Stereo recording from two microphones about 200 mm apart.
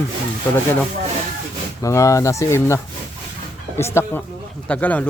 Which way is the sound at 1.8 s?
15° left (ahead or behind).